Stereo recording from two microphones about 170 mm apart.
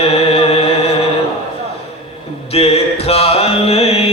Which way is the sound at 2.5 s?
35° left (ahead or behind).